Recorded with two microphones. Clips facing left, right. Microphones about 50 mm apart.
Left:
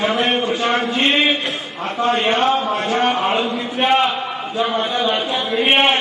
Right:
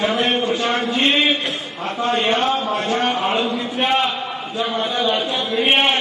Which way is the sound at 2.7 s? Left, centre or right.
Centre.